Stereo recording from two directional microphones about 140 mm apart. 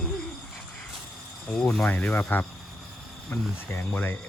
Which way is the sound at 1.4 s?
5° left (ahead or behind).